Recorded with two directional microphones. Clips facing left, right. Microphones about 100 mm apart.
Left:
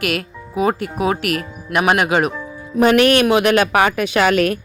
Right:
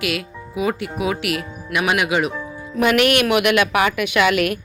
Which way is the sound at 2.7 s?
35° left (ahead or behind).